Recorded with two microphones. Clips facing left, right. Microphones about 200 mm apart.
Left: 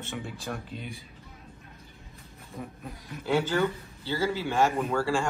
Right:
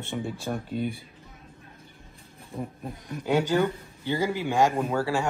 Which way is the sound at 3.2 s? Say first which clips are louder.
Right 2 dB; 15° right (ahead or behind).